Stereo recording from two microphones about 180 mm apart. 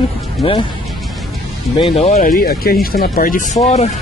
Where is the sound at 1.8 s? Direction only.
35° left (ahead or behind).